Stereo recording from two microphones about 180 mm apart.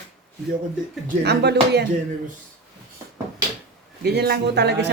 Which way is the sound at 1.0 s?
65° right (ahead or behind).